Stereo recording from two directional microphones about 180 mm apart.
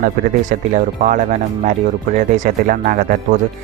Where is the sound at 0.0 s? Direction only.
45° right (ahead or behind).